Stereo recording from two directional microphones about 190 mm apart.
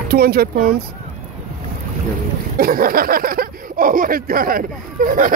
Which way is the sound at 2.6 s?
50° right (ahead or behind).